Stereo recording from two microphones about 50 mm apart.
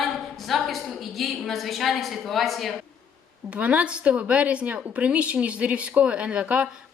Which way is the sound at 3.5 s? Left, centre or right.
Right.